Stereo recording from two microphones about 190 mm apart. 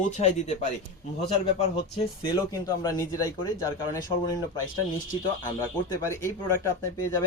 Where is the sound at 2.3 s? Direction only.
20° left (ahead or behind).